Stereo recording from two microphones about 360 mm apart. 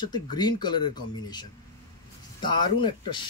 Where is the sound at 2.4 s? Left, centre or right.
Centre.